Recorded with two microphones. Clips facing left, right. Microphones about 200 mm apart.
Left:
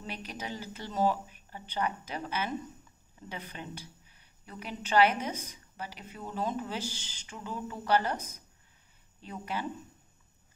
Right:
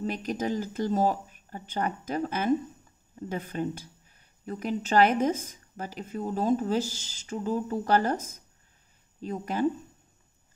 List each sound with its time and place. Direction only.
0.0 s speech: 45° right (ahead or behind)